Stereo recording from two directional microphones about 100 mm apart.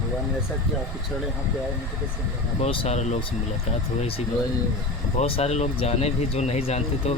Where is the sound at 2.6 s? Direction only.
90° left.